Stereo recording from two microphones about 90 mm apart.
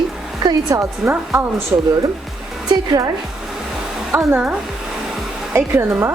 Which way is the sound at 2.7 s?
45° right (ahead or behind).